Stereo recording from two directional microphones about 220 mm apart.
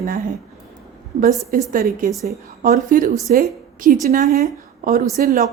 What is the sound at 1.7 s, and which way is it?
A woman's voice, 40° right (ahead or behind).